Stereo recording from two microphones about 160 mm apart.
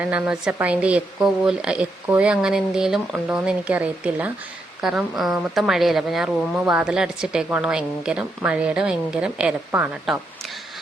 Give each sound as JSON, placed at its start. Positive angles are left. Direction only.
{"t": 0.0, "sound": "a woman's voice", "side_deg": -10}